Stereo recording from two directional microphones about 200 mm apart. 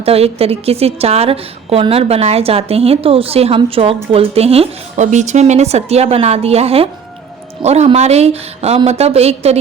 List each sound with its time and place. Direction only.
0.0 s a woman's voice: 30° right (ahead or behind)